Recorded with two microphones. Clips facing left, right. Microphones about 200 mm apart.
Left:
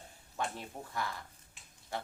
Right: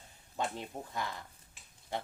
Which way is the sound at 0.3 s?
20° right (ahead or behind).